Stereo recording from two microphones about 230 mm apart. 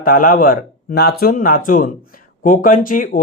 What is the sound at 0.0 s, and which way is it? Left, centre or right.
Speech, left.